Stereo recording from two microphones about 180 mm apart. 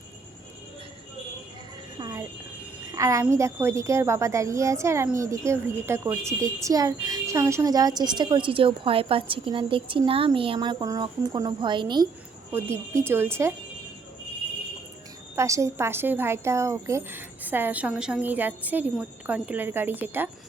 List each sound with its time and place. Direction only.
2.0 s a sound: 20° right (ahead or behind)
2.9 s a woman's voice: 15° right (ahead or behind)
12.5 s speech: 15° right (ahead or behind)
15.4 s speech: 15° right (ahead or behind)